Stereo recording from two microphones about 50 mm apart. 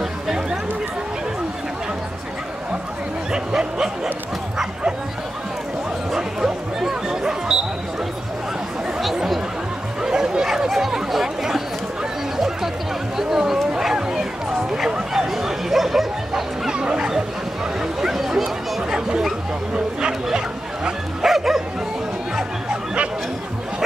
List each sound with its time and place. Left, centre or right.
3.3 s a sound: centre
6.1 s a sound: centre
10.0 s chatter: centre
13.2 s bow-wow: centre
13.7 s a sound: centre
15.3 s bow-wow: centre
16.7 s bow-wow: centre
18.0 s bow-wow: centre
21.3 s bow-wow: centre